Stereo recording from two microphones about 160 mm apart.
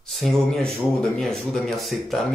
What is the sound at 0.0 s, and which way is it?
Speech, centre (ahead or behind).